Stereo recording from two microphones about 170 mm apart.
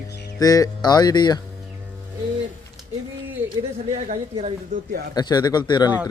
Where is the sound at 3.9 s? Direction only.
45° right (ahead or behind).